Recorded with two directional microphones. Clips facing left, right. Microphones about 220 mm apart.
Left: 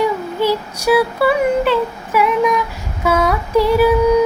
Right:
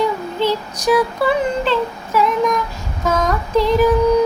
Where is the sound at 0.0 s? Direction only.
10° left (ahead or behind).